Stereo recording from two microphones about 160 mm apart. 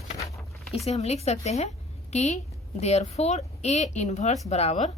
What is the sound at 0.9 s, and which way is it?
A woman's voice, 40° left (ahead or behind).